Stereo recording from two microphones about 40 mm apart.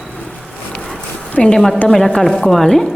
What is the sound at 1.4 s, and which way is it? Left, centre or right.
Speech, left.